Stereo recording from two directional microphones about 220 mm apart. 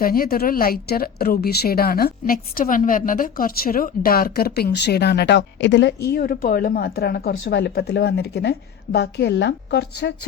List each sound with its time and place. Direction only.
0.0 s a woman's voice: 40° left (ahead or behind)